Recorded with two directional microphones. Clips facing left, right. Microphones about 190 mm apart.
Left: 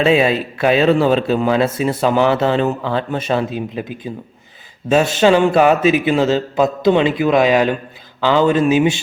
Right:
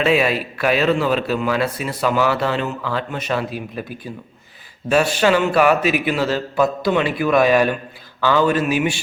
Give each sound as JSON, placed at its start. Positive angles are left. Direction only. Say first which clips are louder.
{"t": 0.0, "sound": "a man's voice", "louder": "left 3 dB", "side_deg": 25}